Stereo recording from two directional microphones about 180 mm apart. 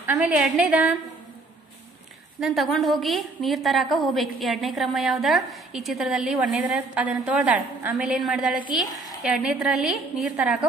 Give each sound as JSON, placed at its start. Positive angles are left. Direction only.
{"t": 0.4, "sound": "a woman's voice", "side_deg": -5}
{"t": 2.4, "sound": "a woman's voice", "side_deg": 0}